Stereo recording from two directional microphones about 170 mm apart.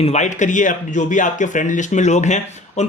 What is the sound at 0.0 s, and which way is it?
Speech, 40° left (ahead or behind).